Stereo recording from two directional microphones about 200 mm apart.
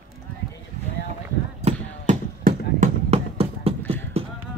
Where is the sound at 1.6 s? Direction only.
40° right (ahead or behind).